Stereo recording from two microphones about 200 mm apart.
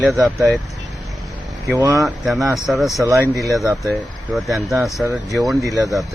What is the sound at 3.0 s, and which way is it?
Speech, 15° right (ahead or behind).